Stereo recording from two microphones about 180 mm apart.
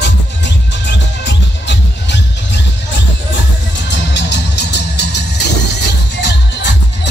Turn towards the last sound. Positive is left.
turn(degrees=75)  # may be behind; listen again after turning